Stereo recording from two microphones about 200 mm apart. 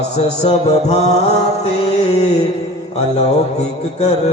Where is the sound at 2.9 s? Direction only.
30° left (ahead or behind).